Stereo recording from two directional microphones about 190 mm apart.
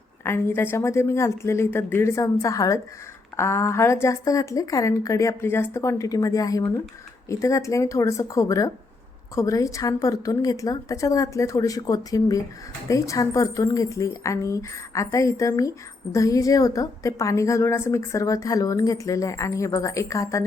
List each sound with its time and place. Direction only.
0.3 s a woman's voice: 10° left (ahead or behind)